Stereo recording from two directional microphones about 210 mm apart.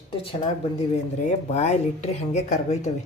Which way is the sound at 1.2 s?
30° left (ahead or behind).